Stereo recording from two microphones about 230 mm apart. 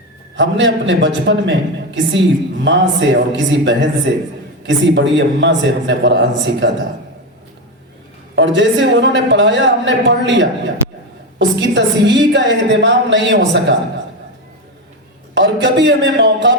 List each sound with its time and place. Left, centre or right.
0.3 s a woman's voice: right
8.4 s a woman's voice: right
15.4 s a woman's voice: right